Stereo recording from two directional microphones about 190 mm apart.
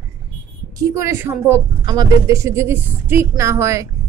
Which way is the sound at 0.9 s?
15° right (ahead or behind).